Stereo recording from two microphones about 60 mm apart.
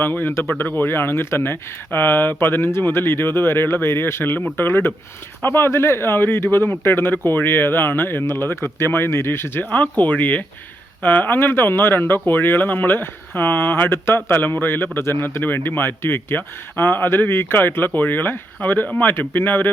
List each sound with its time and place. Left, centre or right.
0.0 s speech: left
9.6 s speech: left